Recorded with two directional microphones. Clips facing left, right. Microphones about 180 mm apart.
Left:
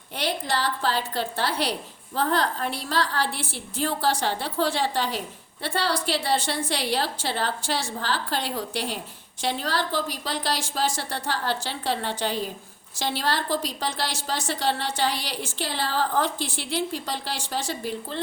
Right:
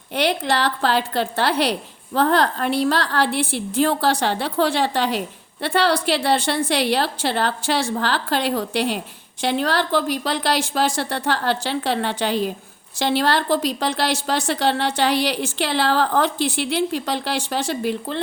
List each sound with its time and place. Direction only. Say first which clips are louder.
0.1 s a woman's voice: right 7 dB; 70° right (ahead or behind)